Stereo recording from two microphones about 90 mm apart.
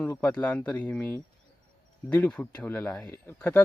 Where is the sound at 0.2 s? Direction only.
15° left (ahead or behind).